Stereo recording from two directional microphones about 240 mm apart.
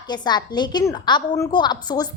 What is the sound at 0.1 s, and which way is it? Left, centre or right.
A woman's voice, centre.